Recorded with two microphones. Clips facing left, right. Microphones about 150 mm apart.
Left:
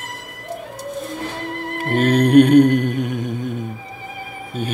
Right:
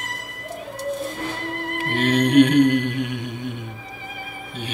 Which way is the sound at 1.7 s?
45° left (ahead or behind).